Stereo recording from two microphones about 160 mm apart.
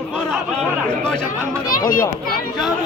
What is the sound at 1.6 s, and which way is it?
Chatter, 60° left (ahead or behind).